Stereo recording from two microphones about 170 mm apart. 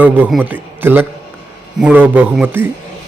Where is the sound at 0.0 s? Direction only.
10° right (ahead or behind).